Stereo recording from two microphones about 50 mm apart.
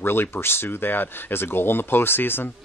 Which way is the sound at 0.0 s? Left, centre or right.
Left.